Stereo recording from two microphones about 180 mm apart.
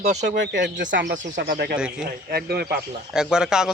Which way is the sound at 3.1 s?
5° right (ahead or behind).